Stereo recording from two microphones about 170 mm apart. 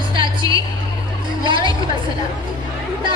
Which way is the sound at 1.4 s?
30° right (ahead or behind).